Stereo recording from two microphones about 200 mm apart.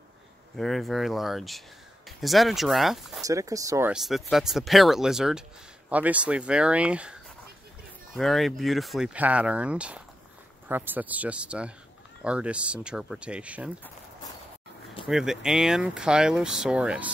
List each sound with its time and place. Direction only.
0.6 s speech: centre (ahead or behind)
3.2 s speech: 15° right (ahead or behind)
3.9 s speech: centre (ahead or behind)
15.0 s speech: centre (ahead or behind)